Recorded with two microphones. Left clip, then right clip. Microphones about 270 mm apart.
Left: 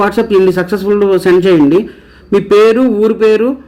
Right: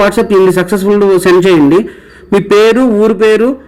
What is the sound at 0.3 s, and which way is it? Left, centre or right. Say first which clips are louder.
A man's voice: right 2 dB; centre.